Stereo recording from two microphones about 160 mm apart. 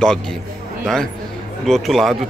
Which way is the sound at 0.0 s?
5° left (ahead or behind).